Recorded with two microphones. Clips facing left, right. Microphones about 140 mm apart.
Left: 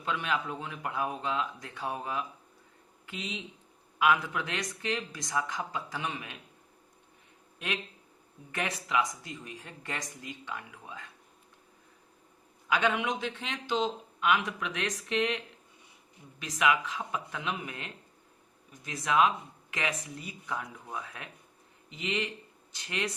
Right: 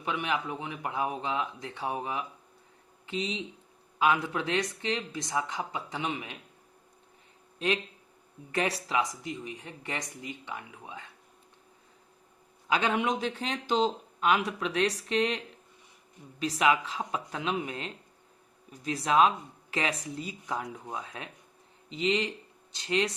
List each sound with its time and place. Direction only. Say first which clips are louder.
0.0 s speech: right 1 dB; 20° right (ahead or behind)
3.1 s speech: right 6 dB; 30° right (ahead or behind)
8.5 s speech: right 2 dB; 30° right (ahead or behind)
9.3 s speech: right 4 dB; 15° right (ahead or behind)
12.6 s speech: right 1 dB; 35° right (ahead or behind)
16.4 s speech: right 2 dB; 30° right (ahead or behind)